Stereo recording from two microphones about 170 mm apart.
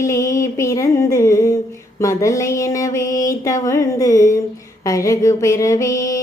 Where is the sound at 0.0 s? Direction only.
20° left (ahead or behind).